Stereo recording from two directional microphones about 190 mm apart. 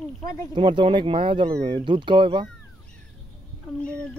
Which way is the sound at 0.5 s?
25° right (ahead or behind).